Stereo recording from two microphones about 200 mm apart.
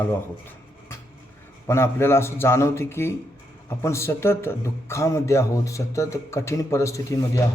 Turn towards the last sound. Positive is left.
turn(degrees=15)  # may be behind; listen again after turning